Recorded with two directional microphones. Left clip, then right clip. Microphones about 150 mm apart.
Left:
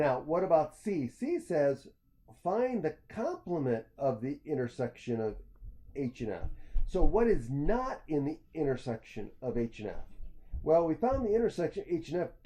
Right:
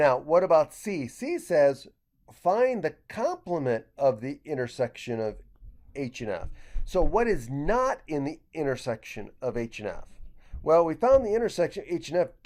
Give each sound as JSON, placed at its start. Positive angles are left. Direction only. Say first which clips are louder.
{"t": 0.0, "sound": "speech", "louder": "right 8 dB", "side_deg": -15}